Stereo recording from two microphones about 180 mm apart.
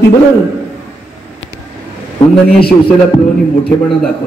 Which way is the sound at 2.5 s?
60° left (ahead or behind).